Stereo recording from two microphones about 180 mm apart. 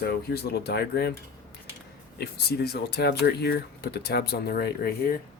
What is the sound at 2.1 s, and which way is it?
Speech, 65° left (ahead or behind).